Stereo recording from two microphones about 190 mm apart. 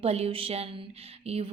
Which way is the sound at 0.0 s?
30° right (ahead or behind).